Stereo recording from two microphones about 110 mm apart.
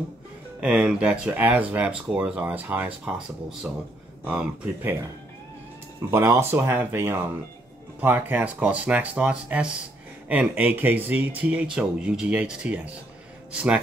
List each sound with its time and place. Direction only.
0.6 s speech: 10° right (ahead or behind)
6.0 s speech: 25° right (ahead or behind)